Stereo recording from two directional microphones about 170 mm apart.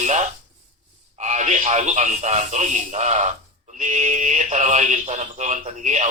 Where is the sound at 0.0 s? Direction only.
45° right (ahead or behind).